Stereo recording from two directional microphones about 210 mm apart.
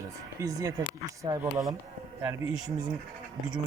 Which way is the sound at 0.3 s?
15° right (ahead or behind).